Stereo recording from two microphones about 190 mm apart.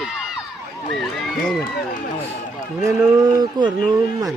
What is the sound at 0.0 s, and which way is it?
Run, centre (ahead or behind).